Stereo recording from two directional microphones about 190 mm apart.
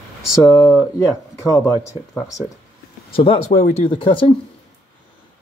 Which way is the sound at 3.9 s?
25° left (ahead or behind).